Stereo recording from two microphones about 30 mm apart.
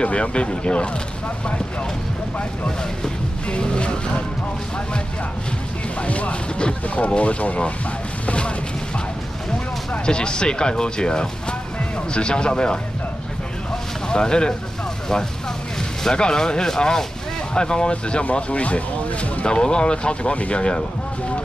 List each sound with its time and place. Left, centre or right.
0.0 s speech: left
3.4 s speech: left
5.9 s speech: left
10.0 s speech: left
14.0 s speech: left
16.2 s speech: left
18.5 s speech: left
19.4 s speech: left